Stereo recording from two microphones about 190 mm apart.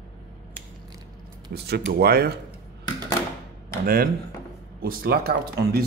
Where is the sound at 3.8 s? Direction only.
50° right (ahead or behind).